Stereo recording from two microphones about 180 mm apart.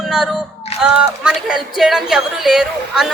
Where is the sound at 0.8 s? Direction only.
5° right (ahead or behind).